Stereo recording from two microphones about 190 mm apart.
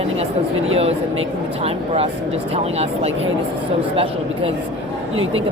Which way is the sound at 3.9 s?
30° right (ahead or behind).